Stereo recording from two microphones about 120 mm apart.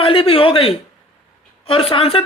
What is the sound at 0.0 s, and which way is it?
A man's voice, 50° left (ahead or behind).